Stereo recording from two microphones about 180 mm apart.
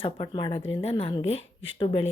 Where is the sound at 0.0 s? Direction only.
25° left (ahead or behind).